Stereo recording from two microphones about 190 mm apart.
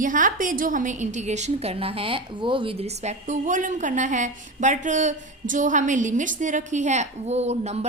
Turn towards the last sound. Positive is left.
turn(degrees=-35)  # may be behind; listen again after turning